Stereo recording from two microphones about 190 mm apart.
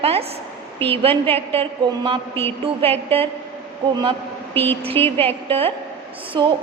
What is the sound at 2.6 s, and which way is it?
A woman's voice, 30° right (ahead or behind).